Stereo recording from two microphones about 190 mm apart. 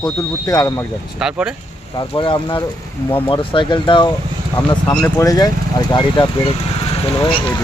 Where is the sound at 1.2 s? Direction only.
5° right (ahead or behind).